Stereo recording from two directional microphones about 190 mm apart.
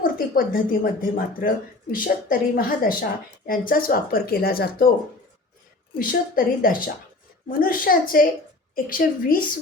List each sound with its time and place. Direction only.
0.3 s speech: 45° left (ahead or behind)
6.0 s speech: 50° left (ahead or behind)